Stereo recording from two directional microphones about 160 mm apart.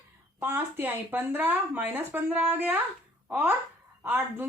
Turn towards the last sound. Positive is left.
turn(degrees=-10)  # may be behind; listen again after turning